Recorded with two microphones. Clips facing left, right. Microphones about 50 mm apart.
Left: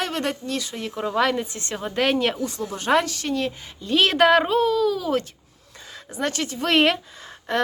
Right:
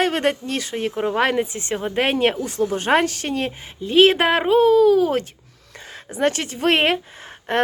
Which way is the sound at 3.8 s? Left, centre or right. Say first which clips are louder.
Right 3 dB; right.